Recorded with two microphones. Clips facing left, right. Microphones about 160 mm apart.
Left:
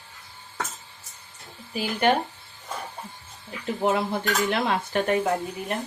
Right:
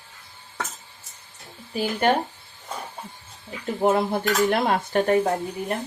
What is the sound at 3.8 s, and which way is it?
Dishes, 40° right (ahead or behind).